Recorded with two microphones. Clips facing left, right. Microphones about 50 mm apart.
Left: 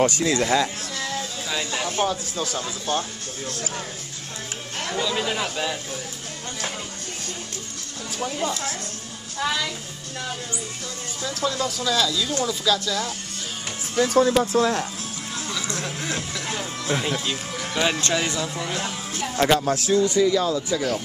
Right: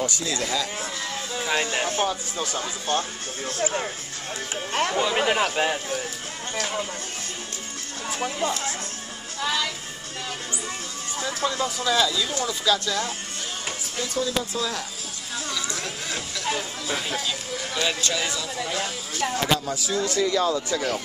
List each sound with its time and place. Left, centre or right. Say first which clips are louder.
0.0 s speech: left 7 dB; left
0.9 s music: left 1 dB; right
2.0 s speech: left 1 dB; centre
3.4 s speech: right 6 dB; right
8.3 s speech: left 1 dB; centre
11.2 s speech: left 1 dB; centre
13.9 s speech: left 9 dB; left
16.9 s speech: left 3 dB; left
17.6 s music: left 3 dB; centre
17.9 s speech: left 3 dB; left
20.2 s speech: left 3 dB; centre